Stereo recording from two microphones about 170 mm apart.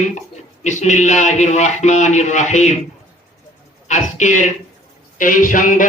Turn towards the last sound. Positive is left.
turn(degrees=50)  # may be behind; listen again after turning